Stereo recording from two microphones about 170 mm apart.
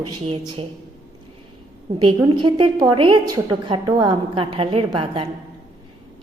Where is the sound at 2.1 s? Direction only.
25° right (ahead or behind).